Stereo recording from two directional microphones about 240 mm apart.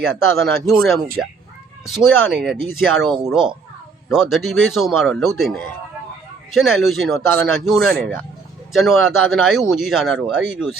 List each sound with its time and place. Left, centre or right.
0.0 s speech: centre